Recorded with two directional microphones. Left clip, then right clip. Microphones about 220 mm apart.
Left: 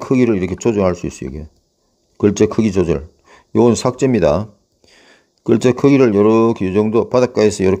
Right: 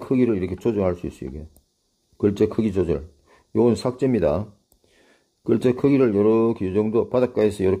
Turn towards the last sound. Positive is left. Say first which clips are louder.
# left 6 dB
turn(degrees=20)  # may be behind; listen again after turning